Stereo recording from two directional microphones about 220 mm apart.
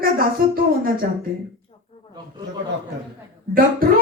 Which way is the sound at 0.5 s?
40° right (ahead or behind).